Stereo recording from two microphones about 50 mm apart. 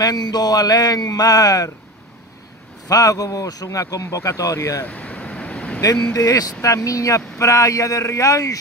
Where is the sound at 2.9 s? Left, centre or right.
Left.